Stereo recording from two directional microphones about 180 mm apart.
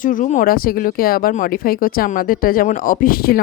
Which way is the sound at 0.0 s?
45° left (ahead or behind).